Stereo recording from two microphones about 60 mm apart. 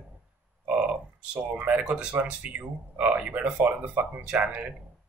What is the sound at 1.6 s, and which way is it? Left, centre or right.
Speech, right.